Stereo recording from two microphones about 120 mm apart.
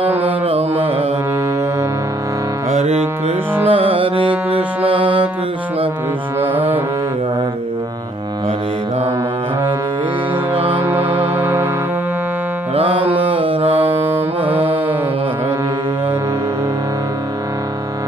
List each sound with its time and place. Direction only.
0.2 s carnatic music: 50° right (ahead or behind)
2.7 s music: 65° right (ahead or behind)
3.6 s music: 50° right (ahead or behind)
5.0 s music: 10° right (ahead or behind)
6.5 s music: 15° right (ahead or behind)
10.5 s music: 15° right (ahead or behind)
12.7 s music: 50° right (ahead or behind)
13.2 s mantra: 50° right (ahead or behind)
13.7 s music: 15° right (ahead or behind)